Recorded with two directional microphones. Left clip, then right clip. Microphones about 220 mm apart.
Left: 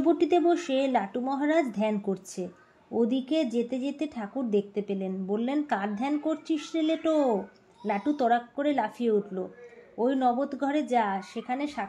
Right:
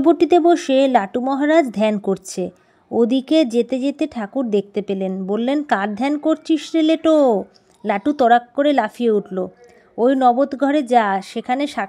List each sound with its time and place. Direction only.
0.0 s a woman's voice: 35° right (ahead or behind)